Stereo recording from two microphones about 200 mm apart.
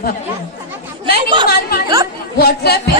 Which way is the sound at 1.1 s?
25° right (ahead or behind).